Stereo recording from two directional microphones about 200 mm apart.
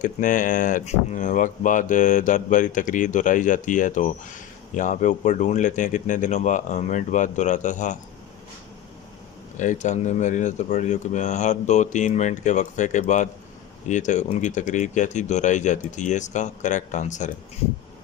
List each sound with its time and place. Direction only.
0.0 s speech: 40° left (ahead or behind)
9.6 s speech: 35° left (ahead or behind)